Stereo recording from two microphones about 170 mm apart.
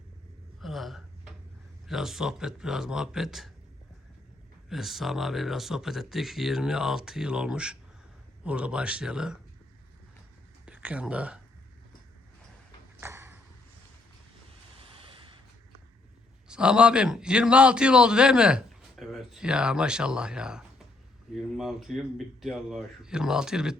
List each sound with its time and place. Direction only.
0.6 s a sound: centre (ahead or behind)
1.9 s a man's voice: centre (ahead or behind)
4.7 s a man's voice: centre (ahead or behind)
10.7 s speech: 5° right (ahead or behind)
13.0 s ping: 15° right (ahead or behind)
16.5 s a man's voice: 5° right (ahead or behind)